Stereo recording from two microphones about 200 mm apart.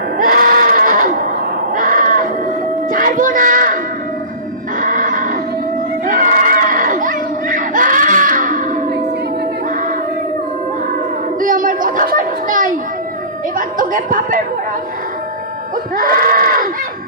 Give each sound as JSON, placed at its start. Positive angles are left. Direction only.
{"t": 0.2, "sound": "bleat", "side_deg": -45}
{"t": 1.7, "sound": "sheep", "side_deg": -40}
{"t": 2.9, "sound": "music", "side_deg": -45}
{"t": 4.8, "sound": "neigh", "side_deg": -40}
{"t": 6.1, "sound": "crowd", "side_deg": -45}
{"t": 11.3, "sound": "children playing", "side_deg": -45}
{"t": 13.6, "sound": "a sound", "side_deg": -45}
{"t": 16.0, "sound": "a sound", "side_deg": -45}